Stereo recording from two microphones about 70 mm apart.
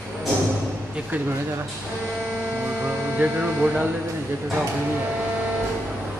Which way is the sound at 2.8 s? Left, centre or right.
Centre.